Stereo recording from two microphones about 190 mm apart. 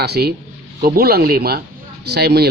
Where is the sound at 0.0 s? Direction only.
55° right (ahead or behind).